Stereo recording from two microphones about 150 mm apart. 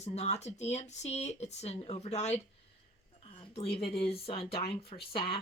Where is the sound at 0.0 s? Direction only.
45° left (ahead or behind).